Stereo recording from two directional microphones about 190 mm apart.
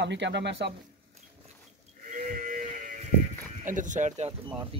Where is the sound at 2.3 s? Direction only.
45° right (ahead or behind).